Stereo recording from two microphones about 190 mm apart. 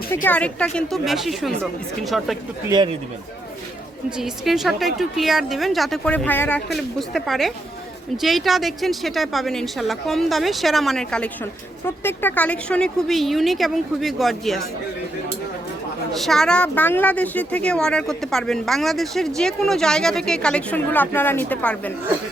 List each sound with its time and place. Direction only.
0.1 s a woman's voice: 10° left (ahead or behind)
2.6 s speech: 20° right (ahead or behind)
4.2 s a woman's voice: centre (ahead or behind)
16.1 s a woman's voice: centre (ahead or behind)